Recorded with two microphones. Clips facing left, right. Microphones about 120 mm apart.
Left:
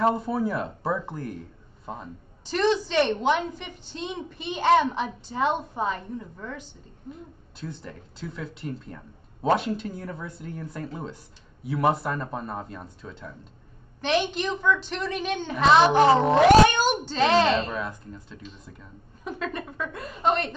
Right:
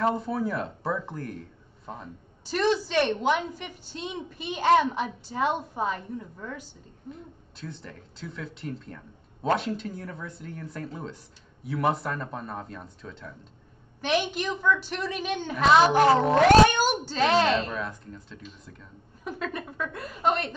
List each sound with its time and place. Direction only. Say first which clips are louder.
0.0 s a woman's voice: left 3 dB; 5° left (ahead or behind)
2.4 s a woman's voice: left 2 dB; 5° right (ahead or behind)
14.0 s a woman's voice: left 2 dB; 5° right (ahead or behind)